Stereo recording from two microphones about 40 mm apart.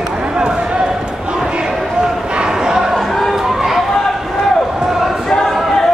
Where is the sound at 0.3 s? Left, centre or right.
Right.